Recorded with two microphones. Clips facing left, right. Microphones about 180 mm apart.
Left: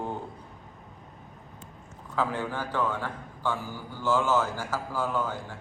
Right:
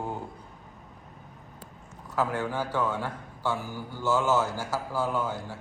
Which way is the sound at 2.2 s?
10° right (ahead or behind).